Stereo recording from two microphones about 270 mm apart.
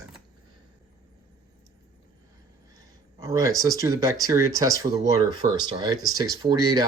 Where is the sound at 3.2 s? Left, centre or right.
Centre.